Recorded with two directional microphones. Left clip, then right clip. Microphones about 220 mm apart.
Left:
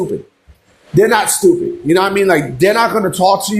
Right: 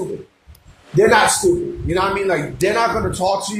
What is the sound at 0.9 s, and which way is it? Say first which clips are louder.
Speech: left 1 dB; 50° left (ahead or behind).